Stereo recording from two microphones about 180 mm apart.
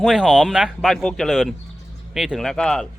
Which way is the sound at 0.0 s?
5° right (ahead or behind).